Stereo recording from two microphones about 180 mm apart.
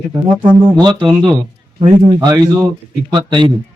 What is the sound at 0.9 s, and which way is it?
Speech, 25° right (ahead or behind).